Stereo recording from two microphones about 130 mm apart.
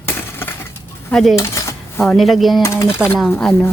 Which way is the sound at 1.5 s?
20° left (ahead or behind).